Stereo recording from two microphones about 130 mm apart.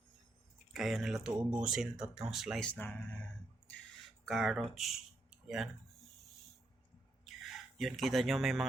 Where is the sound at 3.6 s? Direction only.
Centre (ahead or behind).